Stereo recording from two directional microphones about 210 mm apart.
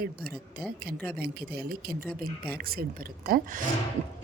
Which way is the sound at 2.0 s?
5° left (ahead or behind).